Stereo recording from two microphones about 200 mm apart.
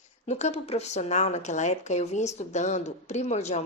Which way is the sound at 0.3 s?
35° left (ahead or behind).